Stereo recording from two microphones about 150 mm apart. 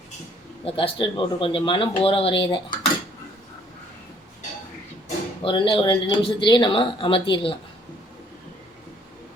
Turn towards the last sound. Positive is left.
turn(degrees=35)  # may be behind; listen again after turning